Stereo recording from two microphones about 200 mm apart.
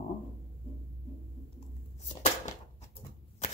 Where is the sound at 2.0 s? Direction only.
35° left (ahead or behind).